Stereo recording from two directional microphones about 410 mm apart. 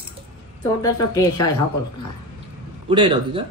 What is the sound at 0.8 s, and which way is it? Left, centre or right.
Speech, centre.